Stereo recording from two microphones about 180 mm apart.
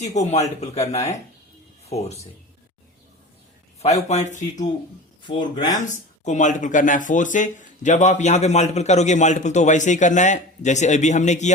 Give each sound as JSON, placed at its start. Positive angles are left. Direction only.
{"t": 0.0, "sound": "speech", "side_deg": 40}
{"t": 3.8, "sound": "speech", "side_deg": 35}
{"t": 5.2, "sound": "speech", "side_deg": 25}
{"t": 6.2, "sound": "speech", "side_deg": 45}